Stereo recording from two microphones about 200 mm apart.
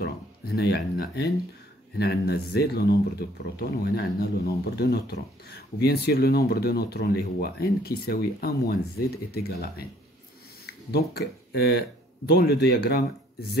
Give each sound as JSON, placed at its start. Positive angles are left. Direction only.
{"t": 0.0, "sound": "speech", "side_deg": 55}